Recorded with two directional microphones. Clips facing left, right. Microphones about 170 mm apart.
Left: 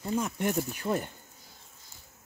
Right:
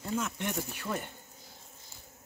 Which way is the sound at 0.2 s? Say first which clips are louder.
Left 5 dB; 40° left (ahead or behind).